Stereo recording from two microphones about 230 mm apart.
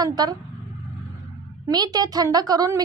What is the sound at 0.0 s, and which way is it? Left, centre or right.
Speech, centre.